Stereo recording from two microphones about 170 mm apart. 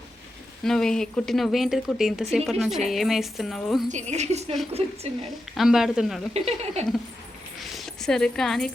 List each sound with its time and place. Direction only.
0.6 s speech: 5° left (ahead or behind)
3.8 s speech: 45° right (ahead or behind)
5.5 s speech: centre (ahead or behind)
6.3 s speech: 40° right (ahead or behind)
7.8 s speech: 5° left (ahead or behind)